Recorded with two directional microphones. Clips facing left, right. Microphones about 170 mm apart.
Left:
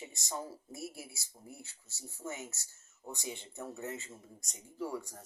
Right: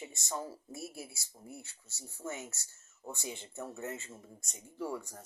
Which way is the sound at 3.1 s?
15° left (ahead or behind).